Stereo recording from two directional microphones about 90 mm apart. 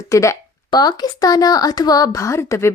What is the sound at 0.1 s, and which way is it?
Speech, 35° left (ahead or behind).